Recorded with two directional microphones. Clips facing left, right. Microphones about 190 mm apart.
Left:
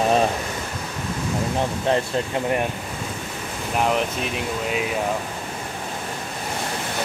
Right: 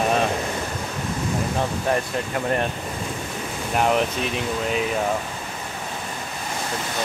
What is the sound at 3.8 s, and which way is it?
Speech, centre (ahead or behind).